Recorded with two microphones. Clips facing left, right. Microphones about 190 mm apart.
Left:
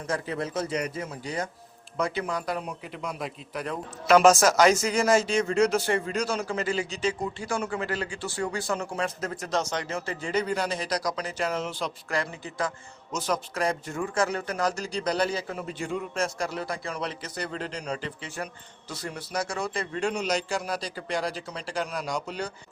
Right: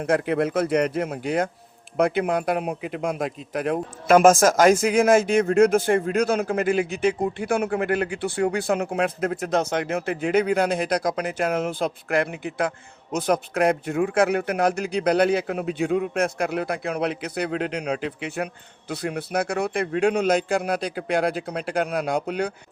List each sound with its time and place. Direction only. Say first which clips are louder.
0.0 s a man's voice: right 9 dB; 60° right (ahead or behind)